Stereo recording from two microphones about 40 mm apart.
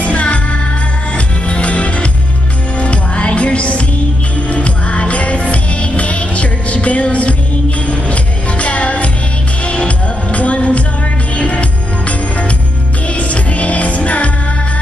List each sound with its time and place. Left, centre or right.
0.0 s music: left
13.1 s music: left